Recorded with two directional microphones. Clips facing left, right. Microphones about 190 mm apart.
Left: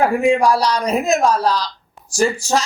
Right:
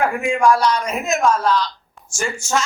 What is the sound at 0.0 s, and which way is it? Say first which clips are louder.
Speech: left 3 dB; 35° left (ahead or behind).